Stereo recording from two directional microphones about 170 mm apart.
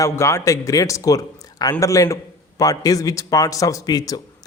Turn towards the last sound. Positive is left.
turn(degrees=25)  # may be behind; listen again after turning